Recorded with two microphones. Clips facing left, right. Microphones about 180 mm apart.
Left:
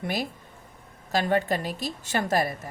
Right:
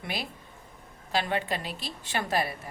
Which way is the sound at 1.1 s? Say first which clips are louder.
Left 5 dB; 45° left (ahead or behind).